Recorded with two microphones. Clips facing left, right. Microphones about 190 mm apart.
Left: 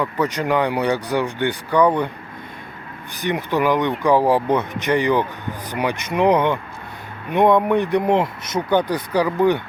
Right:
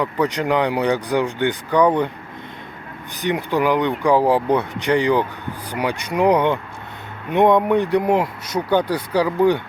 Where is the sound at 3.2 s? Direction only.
15° right (ahead or behind).